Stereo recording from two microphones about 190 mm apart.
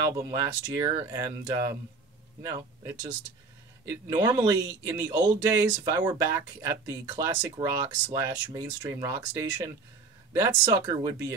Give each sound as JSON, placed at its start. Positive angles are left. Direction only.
{"t": 0.2, "sound": "speech", "side_deg": -20}
{"t": 7.6, "sound": "speech", "side_deg": -30}
{"t": 8.1, "sound": "speech", "side_deg": -15}